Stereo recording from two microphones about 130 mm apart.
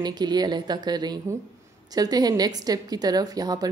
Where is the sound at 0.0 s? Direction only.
35° right (ahead or behind).